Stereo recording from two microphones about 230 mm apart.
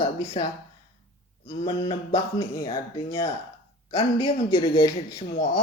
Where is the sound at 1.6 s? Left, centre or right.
Centre.